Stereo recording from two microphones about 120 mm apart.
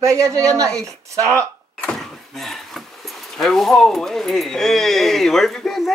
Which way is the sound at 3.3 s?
5° left (ahead or behind).